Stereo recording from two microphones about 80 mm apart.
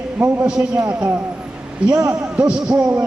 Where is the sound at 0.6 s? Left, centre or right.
Centre.